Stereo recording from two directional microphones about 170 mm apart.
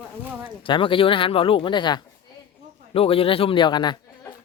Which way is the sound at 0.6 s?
30° left (ahead or behind).